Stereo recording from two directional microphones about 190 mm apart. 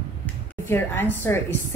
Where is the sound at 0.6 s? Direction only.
10° left (ahead or behind).